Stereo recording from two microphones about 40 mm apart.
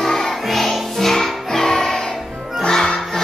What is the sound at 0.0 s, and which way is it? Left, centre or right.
Music, centre.